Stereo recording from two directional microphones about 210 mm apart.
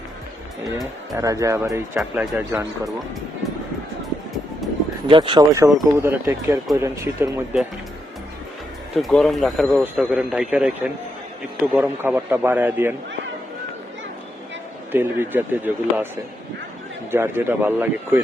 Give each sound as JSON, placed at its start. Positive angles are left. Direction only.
{"t": 1.1, "sound": "speech", "side_deg": -15}
{"t": 5.0, "sound": "speech", "side_deg": -25}
{"t": 9.0, "sound": "speech", "side_deg": 0}
{"t": 14.9, "sound": "speech", "side_deg": -10}
{"t": 17.1, "sound": "speech", "side_deg": -10}